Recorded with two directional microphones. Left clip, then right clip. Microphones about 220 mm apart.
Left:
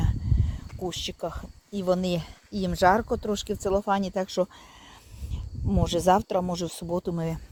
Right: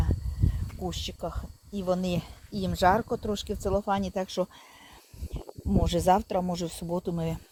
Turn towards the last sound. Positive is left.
turn(degrees=10)  # may be behind; listen again after turning